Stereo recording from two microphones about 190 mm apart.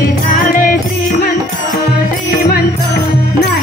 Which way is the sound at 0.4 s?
45° left (ahead or behind).